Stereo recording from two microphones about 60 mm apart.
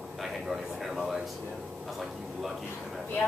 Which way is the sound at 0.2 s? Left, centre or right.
Centre.